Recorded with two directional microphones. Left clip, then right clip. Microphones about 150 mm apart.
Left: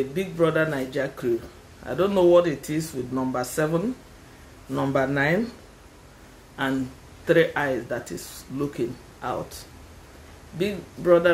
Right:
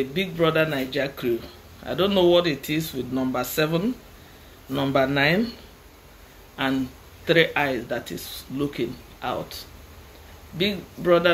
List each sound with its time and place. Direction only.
0.1 s speech: 20° left (ahead or behind)
6.6 s speech: 20° left (ahead or behind)
10.6 s speech: 20° left (ahead or behind)